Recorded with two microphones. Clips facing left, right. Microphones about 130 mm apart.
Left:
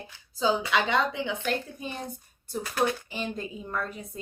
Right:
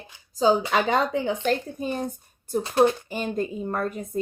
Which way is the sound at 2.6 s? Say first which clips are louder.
Right 7 dB; 25° right (ahead or behind).